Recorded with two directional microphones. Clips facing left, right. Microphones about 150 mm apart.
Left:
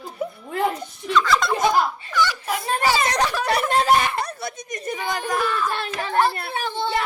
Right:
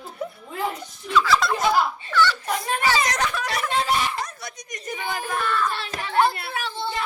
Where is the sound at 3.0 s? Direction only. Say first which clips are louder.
Left 3 dB; 35° left (ahead or behind).